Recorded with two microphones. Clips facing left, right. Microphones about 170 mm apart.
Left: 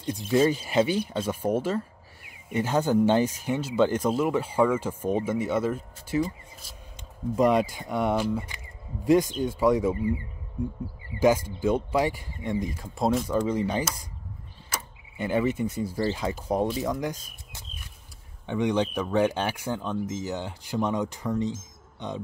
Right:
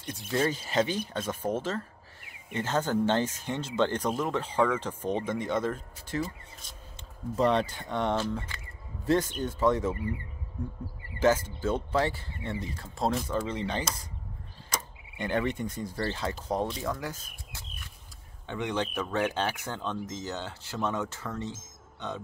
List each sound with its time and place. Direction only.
0.3 s speech: 15° left (ahead or behind)
7.3 s speech: 10° left (ahead or behind)
11.1 s speech: 10° left (ahead or behind)